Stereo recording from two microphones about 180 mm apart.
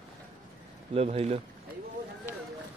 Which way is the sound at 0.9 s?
35° right (ahead or behind).